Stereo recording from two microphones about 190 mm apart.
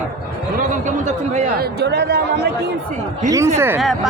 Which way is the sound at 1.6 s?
60° right (ahead or behind).